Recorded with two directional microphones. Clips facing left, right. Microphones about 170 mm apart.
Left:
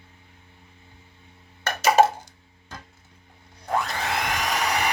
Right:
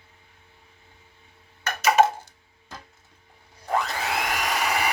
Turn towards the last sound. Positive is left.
turn(degrees=-5)  # may be behind; listen again after turning